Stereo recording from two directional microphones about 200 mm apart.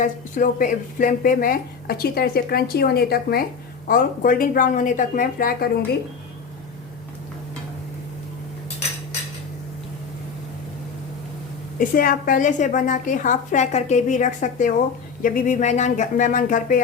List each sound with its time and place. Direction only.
0.0 s a woman's voice: 40° left (ahead or behind)
11.8 s a woman's voice: 45° left (ahead or behind)